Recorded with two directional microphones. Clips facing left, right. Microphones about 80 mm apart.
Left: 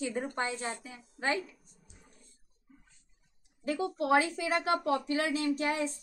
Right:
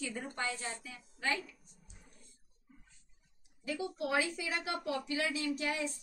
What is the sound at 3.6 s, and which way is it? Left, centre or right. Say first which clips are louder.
A woman's voice: left 5 dB; left.